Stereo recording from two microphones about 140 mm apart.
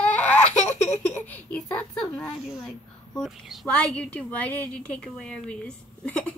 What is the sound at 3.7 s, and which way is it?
A woman's voice, 10° left (ahead or behind).